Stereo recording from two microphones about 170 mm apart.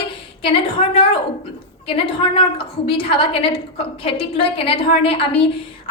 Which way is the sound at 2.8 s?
35° left (ahead or behind).